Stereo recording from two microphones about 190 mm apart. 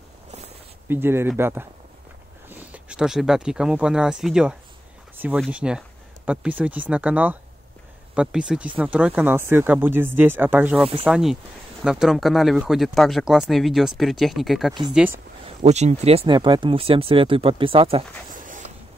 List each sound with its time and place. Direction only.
0.8 s speech: 10° right (ahead or behind)
15.4 s speech: 35° right (ahead or behind)